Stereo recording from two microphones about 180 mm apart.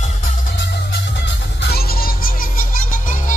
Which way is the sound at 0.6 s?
70° left (ahead or behind).